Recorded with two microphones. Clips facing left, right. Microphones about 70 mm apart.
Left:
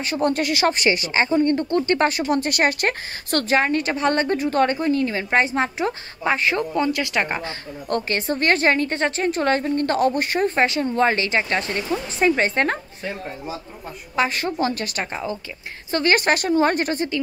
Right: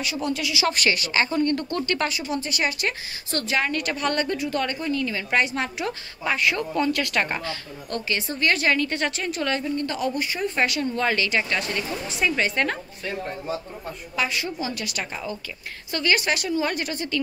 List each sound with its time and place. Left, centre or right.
0.0 s a woman's voice: left
0.7 s speech: left
2.0 s a woman's voice: left
3.5 s a woman's voice: left
6.7 s speech: centre
7.4 s a woman's voice: left
10.5 s a woman's voice: left
14.1 s a woman's voice: left